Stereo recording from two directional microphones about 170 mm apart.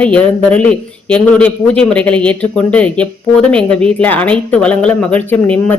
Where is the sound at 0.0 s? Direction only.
10° left (ahead or behind).